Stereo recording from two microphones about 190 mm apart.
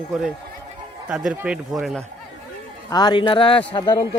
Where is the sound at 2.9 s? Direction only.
20° left (ahead or behind).